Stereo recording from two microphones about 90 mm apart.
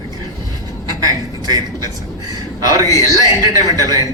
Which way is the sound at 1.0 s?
45° right (ahead or behind).